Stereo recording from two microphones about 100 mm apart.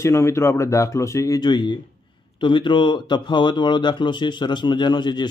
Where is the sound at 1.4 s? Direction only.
50° left (ahead or behind).